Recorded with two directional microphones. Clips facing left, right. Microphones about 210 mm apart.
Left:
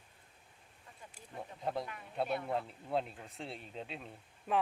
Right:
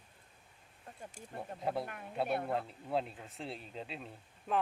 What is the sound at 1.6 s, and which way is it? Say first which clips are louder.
A woman's voice: right 1 dB; 5° right (ahead or behind).